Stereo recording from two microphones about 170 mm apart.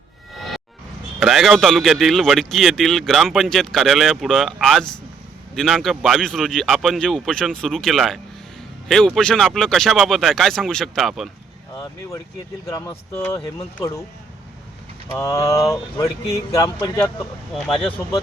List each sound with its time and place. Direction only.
1.2 s speech: centre (ahead or behind)
11.7 s speech: 20° left (ahead or behind)
15.1 s speech: 20° left (ahead or behind)
17.5 s speech: centre (ahead or behind)